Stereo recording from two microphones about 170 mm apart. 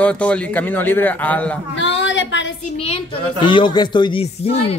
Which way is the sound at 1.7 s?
90° left.